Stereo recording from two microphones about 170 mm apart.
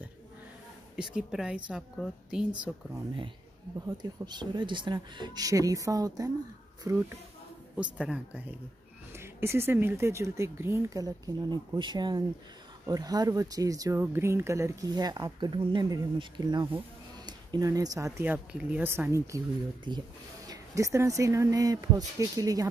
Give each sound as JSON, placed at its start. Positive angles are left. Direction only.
{"t": 0.9, "sound": "a woman's voice", "side_deg": -5}
{"t": 3.8, "sound": "speech", "side_deg": -25}
{"t": 7.7, "sound": "speech", "side_deg": -5}
{"t": 20.4, "sound": "speech", "side_deg": -20}